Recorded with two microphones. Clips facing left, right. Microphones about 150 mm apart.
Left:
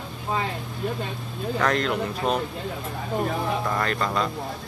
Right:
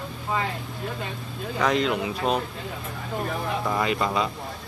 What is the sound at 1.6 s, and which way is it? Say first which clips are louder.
Speech: right 1 dB; centre (ahead or behind).